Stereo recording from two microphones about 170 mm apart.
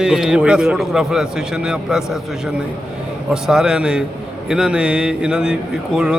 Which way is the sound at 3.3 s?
5° right (ahead or behind).